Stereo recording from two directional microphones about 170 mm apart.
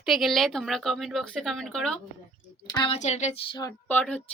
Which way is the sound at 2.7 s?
30° left (ahead or behind).